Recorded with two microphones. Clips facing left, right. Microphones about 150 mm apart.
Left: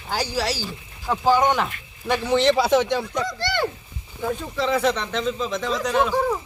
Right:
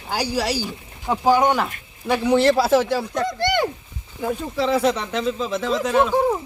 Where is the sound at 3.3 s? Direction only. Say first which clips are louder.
Right 4 dB; 15° right (ahead or behind).